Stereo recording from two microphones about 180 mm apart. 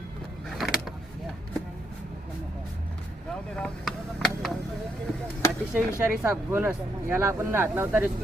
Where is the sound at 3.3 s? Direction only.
5° left (ahead or behind).